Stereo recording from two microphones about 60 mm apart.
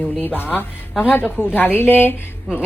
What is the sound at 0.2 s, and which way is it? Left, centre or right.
A woman's voice, left.